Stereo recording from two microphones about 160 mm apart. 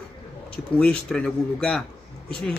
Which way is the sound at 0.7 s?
5° left (ahead or behind).